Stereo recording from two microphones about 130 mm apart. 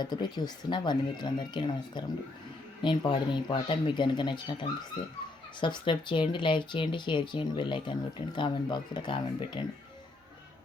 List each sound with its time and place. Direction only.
0.0 s speech: 35° left (ahead or behind)